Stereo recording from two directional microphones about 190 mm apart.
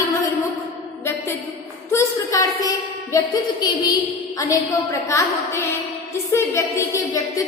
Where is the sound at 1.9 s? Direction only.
15° left (ahead or behind).